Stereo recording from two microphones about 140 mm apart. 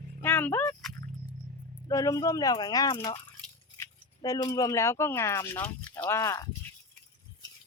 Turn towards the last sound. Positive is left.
turn(degrees=25)  # may be behind; listen again after turning